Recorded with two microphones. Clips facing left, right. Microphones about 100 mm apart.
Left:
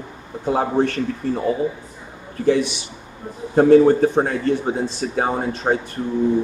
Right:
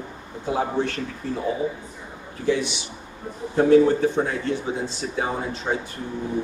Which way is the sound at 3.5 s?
40° left (ahead or behind).